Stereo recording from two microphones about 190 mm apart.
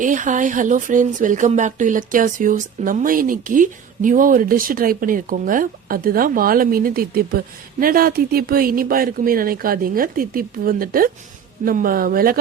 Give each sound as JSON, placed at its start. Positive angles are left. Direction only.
{"t": 0.0, "sound": "speech", "side_deg": -40}